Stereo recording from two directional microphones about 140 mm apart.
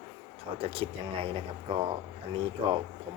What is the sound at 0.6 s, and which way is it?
Speech, 40° right (ahead or behind).